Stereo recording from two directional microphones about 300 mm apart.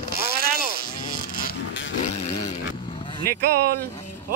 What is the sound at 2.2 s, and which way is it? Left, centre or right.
Vehicle, left.